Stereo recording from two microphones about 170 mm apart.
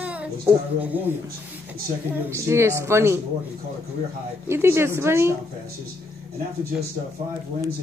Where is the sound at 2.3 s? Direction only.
15° right (ahead or behind).